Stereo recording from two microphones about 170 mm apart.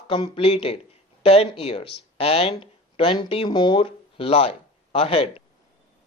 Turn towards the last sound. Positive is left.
turn(degrees=35)  # may be behind; listen again after turning